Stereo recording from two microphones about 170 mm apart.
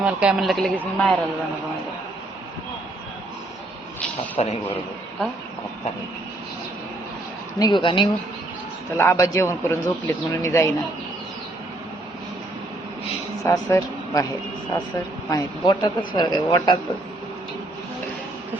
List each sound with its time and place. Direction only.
0.0 s a man's voice: 5° right (ahead or behind)
4.4 s a man's voice: 35° left (ahead or behind)
7.6 s a woman's voice: 30° left (ahead or behind)
9.0 s a man's voice: 15° left (ahead or behind)
13.4 s a woman's voice: 20° left (ahead or behind)